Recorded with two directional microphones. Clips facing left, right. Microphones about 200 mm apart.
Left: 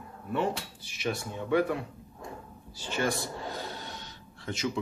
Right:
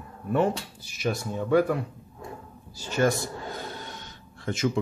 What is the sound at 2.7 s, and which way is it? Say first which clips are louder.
Speech: right 6 dB; 40° right (ahead or behind).